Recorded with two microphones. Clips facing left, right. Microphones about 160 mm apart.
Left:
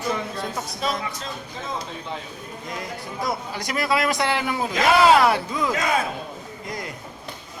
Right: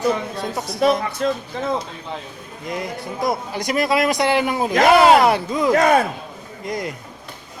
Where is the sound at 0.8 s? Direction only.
60° right (ahead or behind).